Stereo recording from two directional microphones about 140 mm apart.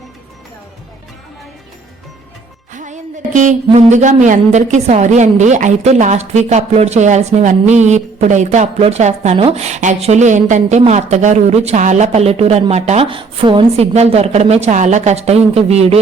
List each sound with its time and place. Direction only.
2.7 s music: 60° right (ahead or behind)
3.7 s a woman's voice: 50° right (ahead or behind)
13.1 s a woman's voice: 35° right (ahead or behind)
13.9 s speech: 50° right (ahead or behind)